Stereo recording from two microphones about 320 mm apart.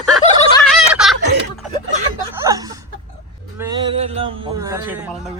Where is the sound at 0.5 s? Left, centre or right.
Centre.